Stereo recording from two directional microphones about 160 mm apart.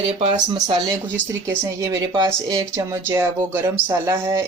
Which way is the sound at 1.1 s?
15° right (ahead or behind).